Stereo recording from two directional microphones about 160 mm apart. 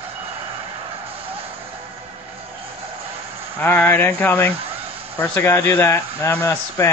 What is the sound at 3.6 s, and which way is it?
Speech, 10° left (ahead or behind).